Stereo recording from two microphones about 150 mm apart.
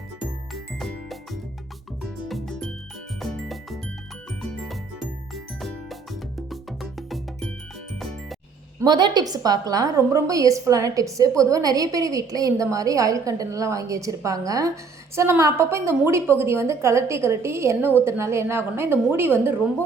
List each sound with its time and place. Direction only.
0.5 s music: centre (ahead or behind)
8.8 s a woman's voice: 30° right (ahead or behind)